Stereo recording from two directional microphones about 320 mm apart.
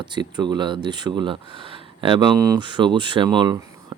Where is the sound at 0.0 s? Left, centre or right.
Centre.